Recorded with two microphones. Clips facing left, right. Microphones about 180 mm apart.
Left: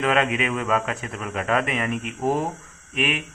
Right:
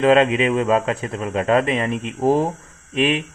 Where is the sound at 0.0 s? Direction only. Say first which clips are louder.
Right 7 dB; 30° right (ahead or behind).